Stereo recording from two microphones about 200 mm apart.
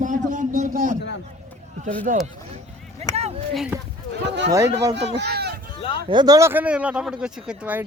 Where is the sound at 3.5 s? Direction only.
Centre (ahead or behind).